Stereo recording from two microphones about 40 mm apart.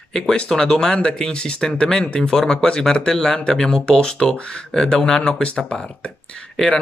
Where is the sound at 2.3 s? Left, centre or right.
Centre.